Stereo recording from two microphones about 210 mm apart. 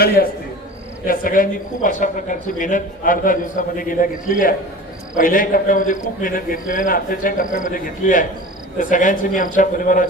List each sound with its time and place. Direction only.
1.0 s a man's voice: 40° left (ahead or behind)